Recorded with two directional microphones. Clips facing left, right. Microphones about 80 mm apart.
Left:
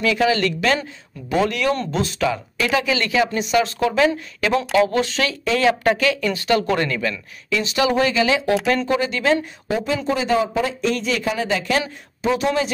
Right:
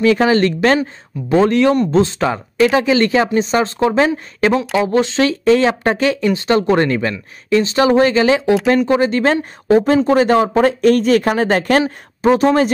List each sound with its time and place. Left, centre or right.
0.0 s speech: right